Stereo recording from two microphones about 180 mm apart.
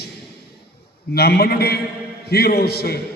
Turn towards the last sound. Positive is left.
turn(degrees=60)  # may be behind; listen again after turning